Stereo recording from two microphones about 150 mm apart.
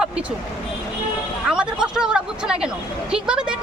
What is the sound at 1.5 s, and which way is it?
Speech, 5° right (ahead or behind).